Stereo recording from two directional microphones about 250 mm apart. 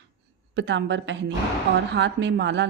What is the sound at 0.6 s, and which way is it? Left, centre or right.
A woman's voice, right.